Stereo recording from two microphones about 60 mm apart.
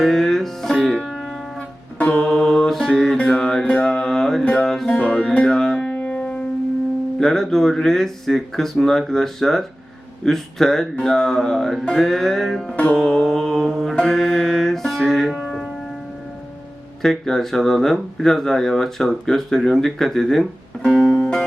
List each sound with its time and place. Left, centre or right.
0.0 s music: centre
1.5 s music: left; by 3.2 s centre
3.2 s music: centre
4.9 s music: centre
7.2 s speech: centre
12.7 s music: left
13.1 s speech: centre
13.9 s music: centre
15.3 s church bell: centre
17.0 s speech: centre